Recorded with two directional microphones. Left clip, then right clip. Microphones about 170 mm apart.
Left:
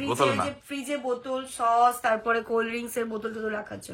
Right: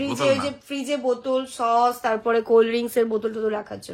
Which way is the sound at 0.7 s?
55° right (ahead or behind).